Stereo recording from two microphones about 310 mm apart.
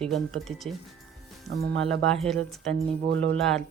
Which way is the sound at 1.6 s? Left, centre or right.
Right.